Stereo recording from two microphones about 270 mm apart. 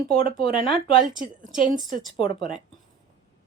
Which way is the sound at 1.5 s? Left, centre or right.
Centre.